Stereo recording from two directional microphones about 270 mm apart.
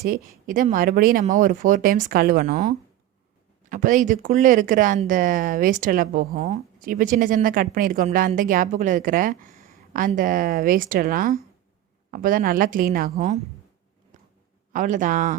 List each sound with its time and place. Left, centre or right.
0.1 s a woman's voice: right
14.1 s a sound: right
14.7 s speech: right